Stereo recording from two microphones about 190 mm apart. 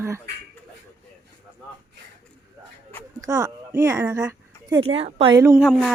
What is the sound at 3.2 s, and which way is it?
Speech, 15° right (ahead or behind).